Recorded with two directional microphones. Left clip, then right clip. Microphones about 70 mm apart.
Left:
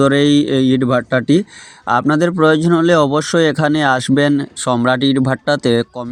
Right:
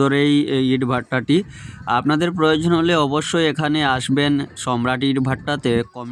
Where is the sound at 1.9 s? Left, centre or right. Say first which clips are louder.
Left 5 dB; left.